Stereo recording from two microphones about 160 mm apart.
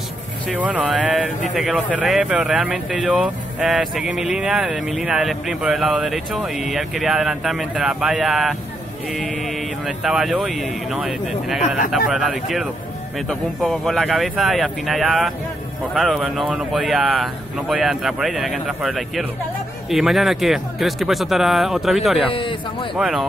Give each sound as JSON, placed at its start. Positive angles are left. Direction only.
{"t": 0.6, "sound": "speech", "side_deg": -10}
{"t": 22.3, "sound": "speech", "side_deg": 30}
{"t": 22.9, "sound": "speech", "side_deg": -5}